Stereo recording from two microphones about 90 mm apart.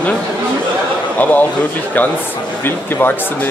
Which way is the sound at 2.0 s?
20° left (ahead or behind).